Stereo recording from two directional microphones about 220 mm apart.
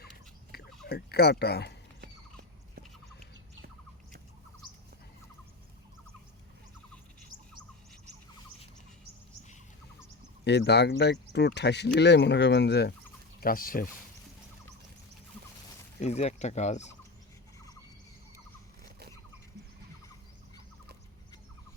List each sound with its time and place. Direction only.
0.5 s a sound: 45° left (ahead or behind)
0.9 s speech: 45° left (ahead or behind)
2.0 s dog: 45° right (ahead or behind)
10.4 s speech: 50° left (ahead or behind)
16.0 s speech: 30° left (ahead or behind)